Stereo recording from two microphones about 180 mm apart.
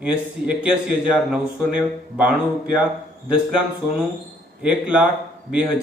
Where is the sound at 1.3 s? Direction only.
5° right (ahead or behind).